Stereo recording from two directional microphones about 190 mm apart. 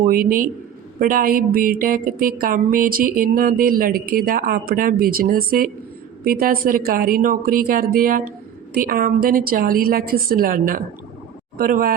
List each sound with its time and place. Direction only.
0.0 s speech: 50° right (ahead or behind)